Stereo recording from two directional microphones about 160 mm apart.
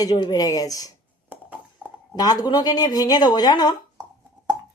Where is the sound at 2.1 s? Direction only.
25° left (ahead or behind).